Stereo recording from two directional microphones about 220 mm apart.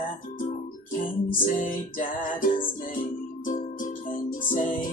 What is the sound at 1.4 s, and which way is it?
Music, 40° left (ahead or behind).